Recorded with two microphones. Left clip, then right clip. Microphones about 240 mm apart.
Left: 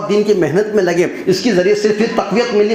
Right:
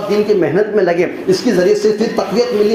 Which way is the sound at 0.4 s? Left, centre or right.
Left.